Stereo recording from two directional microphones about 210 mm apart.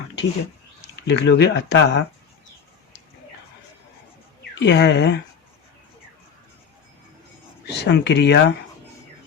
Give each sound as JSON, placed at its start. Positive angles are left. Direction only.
{"t": 1.0, "sound": "speech", "side_deg": 55}
{"t": 4.6, "sound": "speech", "side_deg": 55}
{"t": 7.7, "sound": "speech", "side_deg": 55}